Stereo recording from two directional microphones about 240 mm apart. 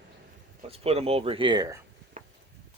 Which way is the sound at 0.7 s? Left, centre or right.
Right.